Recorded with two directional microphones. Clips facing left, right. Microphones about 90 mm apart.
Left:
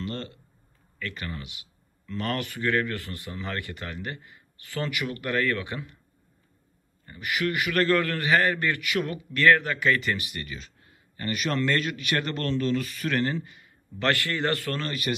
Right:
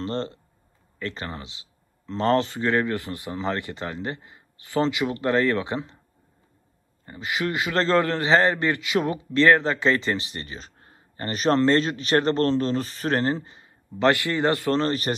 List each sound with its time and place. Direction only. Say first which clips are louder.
0.0 s speech: right 6 dB; 30° right (ahead or behind)
7.1 s a man's voice: right 1 dB; 20° right (ahead or behind)